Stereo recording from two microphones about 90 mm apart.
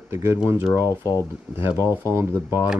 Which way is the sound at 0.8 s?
40° left (ahead or behind).